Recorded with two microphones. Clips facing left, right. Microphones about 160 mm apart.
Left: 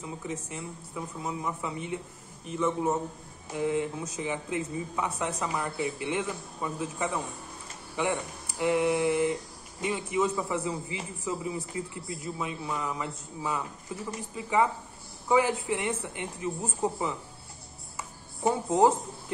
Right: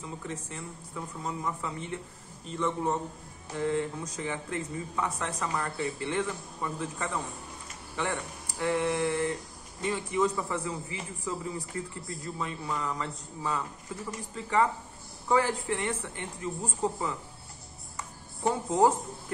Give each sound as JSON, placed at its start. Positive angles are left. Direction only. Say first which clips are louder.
{"t": 0.3, "sound": "a man's voice", "louder": "left 2 dB", "side_deg": 15}
{"t": 18.7, "sound": "speech", "louder": "left 1 dB", "side_deg": 15}